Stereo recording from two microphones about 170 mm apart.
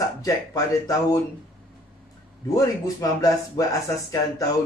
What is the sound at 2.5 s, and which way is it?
Speech, 20° left (ahead or behind).